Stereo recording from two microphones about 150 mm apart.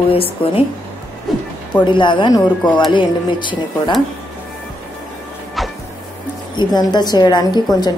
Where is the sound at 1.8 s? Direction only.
35° left (ahead or behind).